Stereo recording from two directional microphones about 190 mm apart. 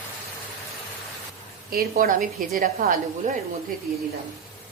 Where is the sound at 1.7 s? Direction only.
50° right (ahead or behind).